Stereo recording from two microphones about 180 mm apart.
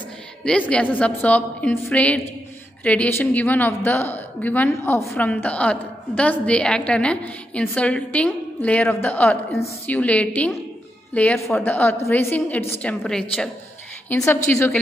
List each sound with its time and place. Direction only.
0.5 s a woman's voice: 5° left (ahead or behind)